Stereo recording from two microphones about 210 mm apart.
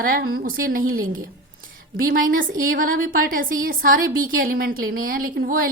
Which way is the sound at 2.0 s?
40° right (ahead or behind).